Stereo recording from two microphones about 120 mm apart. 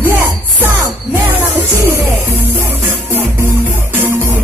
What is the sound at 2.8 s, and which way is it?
Music, 15° right (ahead or behind).